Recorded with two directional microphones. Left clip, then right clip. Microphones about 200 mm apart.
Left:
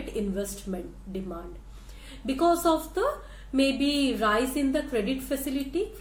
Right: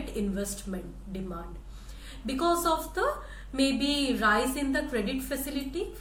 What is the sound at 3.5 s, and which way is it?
A woman's voice, 55° left (ahead or behind).